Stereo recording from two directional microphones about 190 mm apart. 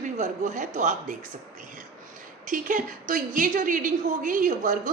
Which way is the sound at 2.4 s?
45° right (ahead or behind).